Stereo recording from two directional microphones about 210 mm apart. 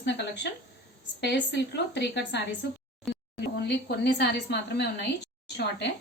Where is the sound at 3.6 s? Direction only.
50° left (ahead or behind).